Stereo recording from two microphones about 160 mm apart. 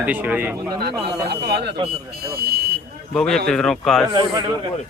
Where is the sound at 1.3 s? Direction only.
85° right.